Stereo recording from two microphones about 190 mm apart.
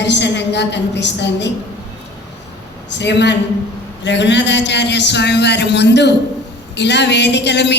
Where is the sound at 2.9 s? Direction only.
65° left (ahead or behind).